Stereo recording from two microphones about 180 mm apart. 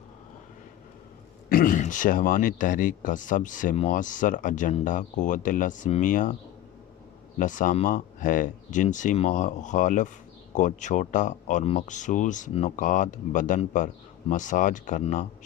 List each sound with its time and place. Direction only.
1.5 s speech: 50° left (ahead or behind)
7.3 s speech: 45° left (ahead or behind)